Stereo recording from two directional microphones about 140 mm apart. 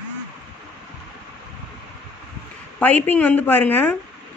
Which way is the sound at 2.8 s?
10° left (ahead or behind).